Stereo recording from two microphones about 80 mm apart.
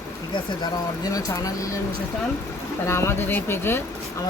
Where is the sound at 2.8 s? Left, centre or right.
Left.